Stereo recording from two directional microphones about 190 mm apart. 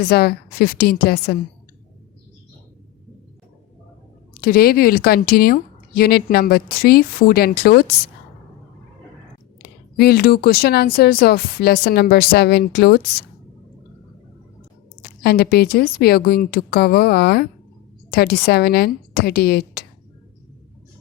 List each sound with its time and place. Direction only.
0.0 s speech: 55° left (ahead or behind)
4.4 s speech: 50° left (ahead or behind)
9.6 s speech: 55° left (ahead or behind)
15.2 s speech: 55° left (ahead or behind)